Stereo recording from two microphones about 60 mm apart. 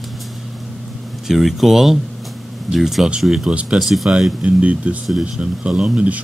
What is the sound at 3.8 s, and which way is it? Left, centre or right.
Speech, centre.